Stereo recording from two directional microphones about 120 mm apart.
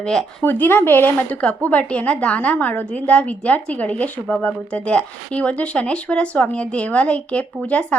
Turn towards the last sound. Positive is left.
turn(degrees=10)  # may be behind; listen again after turning